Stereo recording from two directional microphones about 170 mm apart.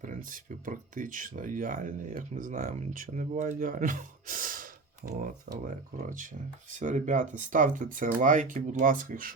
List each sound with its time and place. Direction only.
0.0 s speech: 50° right (ahead or behind)